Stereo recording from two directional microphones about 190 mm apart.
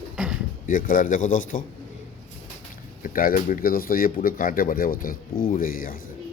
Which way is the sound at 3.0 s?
45° left (ahead or behind).